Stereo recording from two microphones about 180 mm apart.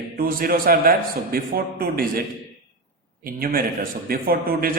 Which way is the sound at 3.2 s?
55° right (ahead or behind).